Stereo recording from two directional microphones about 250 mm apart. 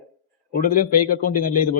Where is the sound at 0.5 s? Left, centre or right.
Left.